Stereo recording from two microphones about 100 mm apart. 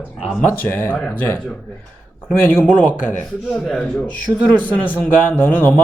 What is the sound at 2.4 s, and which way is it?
Speech, 15° left (ahead or behind).